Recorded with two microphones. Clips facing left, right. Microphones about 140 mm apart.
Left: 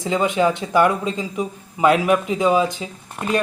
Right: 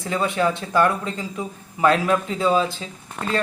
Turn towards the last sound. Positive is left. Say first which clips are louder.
# left 3 dB
turn(degrees=15)  # may be behind; listen again after turning